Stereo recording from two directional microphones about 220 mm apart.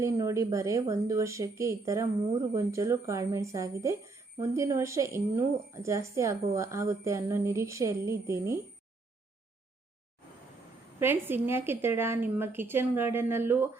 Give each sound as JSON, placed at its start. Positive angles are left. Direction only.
{"t": 0.0, "sound": "speech", "side_deg": -15}
{"t": 11.0, "sound": "speech", "side_deg": -10}